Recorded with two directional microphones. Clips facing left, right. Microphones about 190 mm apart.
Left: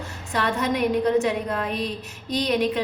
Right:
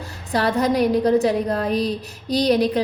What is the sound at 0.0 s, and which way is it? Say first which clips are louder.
A woman's voice: right 4 dB; 35° right (ahead or behind).